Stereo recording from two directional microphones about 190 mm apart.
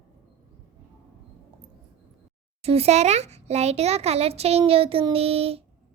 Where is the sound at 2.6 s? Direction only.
30° right (ahead or behind).